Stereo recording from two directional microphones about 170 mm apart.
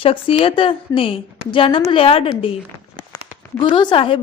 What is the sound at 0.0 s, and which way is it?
A woman's voice, 35° left (ahead or behind).